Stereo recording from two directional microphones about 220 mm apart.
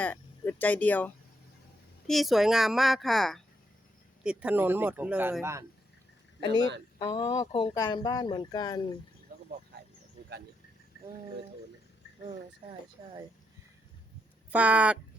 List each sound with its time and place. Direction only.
0.0 s a woman's voice: 10° left (ahead or behind); by 5.6 s 10° right (ahead or behind)
6.4 s speech: 20° left (ahead or behind)
9.3 s a sound: 45° right (ahead or behind)
14.5 s speech: 5° right (ahead or behind)